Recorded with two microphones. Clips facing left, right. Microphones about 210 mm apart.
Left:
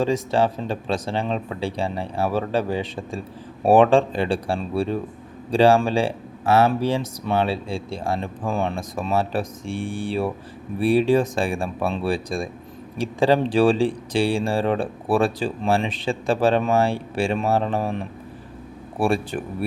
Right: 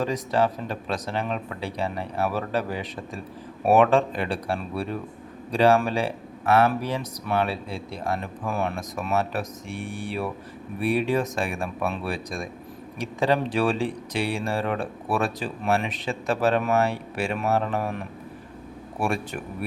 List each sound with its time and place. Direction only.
0.0 s speech: 30° left (ahead or behind)